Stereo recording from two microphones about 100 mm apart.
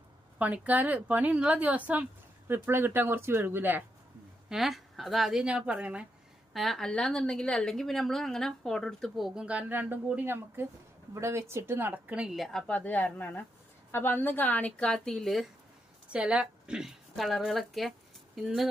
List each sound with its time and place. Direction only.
0.3 s a woman's voice: 15° right (ahead or behind)
4.4 s a woman's voice: centre (ahead or behind)
6.5 s a woman's voice: centre (ahead or behind)
16.0 s a woman's voice: 10° right (ahead or behind)